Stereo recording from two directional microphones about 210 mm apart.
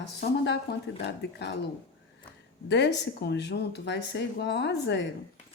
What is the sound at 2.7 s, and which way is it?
Speech, 55° left (ahead or behind).